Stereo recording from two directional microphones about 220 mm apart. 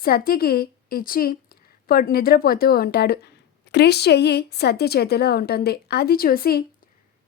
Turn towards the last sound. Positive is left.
turn(degrees=40)  # may be behind; listen again after turning